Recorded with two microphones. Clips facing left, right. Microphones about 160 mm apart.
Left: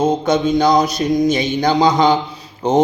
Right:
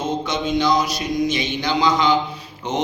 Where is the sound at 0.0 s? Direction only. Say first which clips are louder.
Left 8 dB; 45° left (ahead or behind).